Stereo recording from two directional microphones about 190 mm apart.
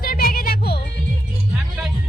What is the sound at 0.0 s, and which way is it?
Music, 50° left (ahead or behind).